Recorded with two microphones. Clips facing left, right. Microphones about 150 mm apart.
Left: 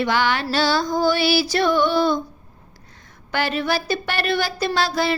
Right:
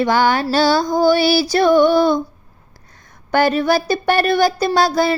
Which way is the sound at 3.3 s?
45° right (ahead or behind).